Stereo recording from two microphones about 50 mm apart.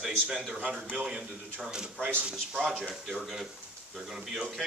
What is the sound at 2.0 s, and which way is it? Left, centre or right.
Speech, right.